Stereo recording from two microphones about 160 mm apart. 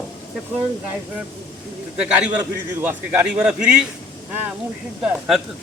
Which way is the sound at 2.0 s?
5° right (ahead or behind).